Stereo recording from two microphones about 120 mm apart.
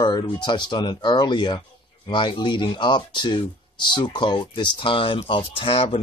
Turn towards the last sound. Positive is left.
turn(degrees=50)  # may be behind; listen again after turning